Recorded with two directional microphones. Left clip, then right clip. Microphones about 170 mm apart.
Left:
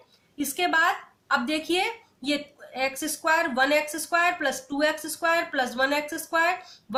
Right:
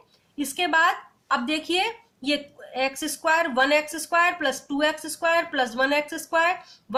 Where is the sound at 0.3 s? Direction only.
30° right (ahead or behind).